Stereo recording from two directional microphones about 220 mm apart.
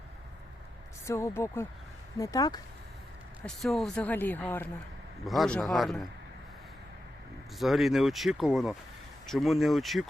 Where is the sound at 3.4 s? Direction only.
Centre (ahead or behind).